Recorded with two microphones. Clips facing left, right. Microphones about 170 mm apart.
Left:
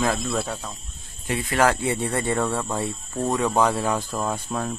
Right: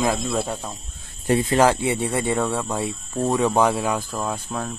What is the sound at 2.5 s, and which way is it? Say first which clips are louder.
Speech: right 1 dB; centre (ahead or behind).